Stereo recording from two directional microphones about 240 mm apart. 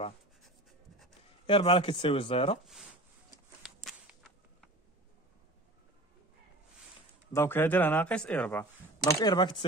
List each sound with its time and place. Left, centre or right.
0.4 s writing: centre
1.5 s speech: left
3.6 s whip: centre
7.3 s speech: centre